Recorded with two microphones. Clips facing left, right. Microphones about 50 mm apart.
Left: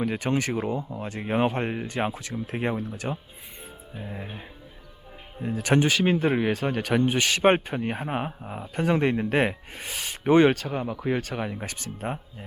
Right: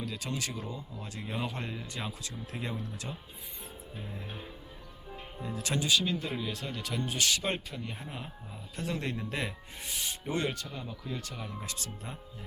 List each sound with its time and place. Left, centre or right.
0.0 s speech: left
5.4 s speech: left
11.5 s speech: left